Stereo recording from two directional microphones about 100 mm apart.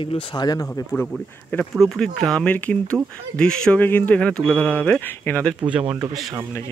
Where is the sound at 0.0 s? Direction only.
50° left (ahead or behind).